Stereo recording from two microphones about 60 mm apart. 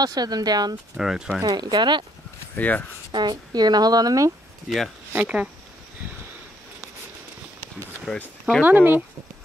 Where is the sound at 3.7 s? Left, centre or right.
Right.